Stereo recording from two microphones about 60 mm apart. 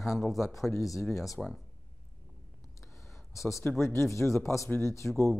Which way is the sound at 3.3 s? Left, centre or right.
Left.